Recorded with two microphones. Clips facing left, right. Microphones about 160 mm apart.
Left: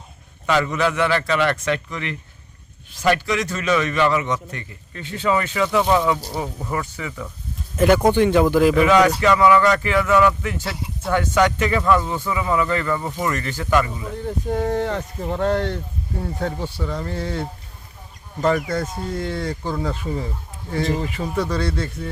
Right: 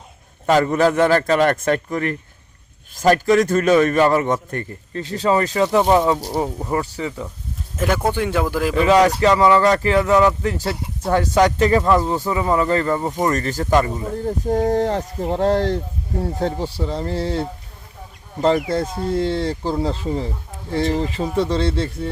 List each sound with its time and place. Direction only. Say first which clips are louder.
0.4 s a man's voice: right 5 dB; 45° right (ahead or behind)
4.9 s speech: right 3 dB; 35° right (ahead or behind)
7.8 s speech: left 5 dB; centre (ahead or behind)
8.7 s speech: right 1 dB; 30° right (ahead or behind)